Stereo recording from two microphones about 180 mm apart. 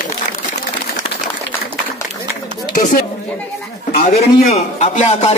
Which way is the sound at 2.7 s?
50° left (ahead or behind).